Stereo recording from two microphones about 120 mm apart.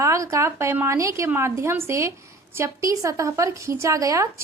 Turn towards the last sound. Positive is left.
turn(degrees=-25)  # may be behind; listen again after turning